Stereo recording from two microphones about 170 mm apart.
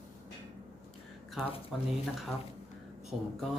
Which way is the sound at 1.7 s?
Centre (ahead or behind).